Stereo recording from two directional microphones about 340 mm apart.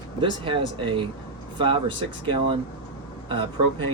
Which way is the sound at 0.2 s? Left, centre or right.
Centre.